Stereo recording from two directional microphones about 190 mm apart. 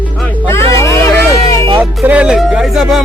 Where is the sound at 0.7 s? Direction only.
15° left (ahead or behind).